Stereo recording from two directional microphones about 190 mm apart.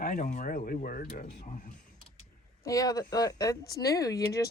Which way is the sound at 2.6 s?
20° left (ahead or behind).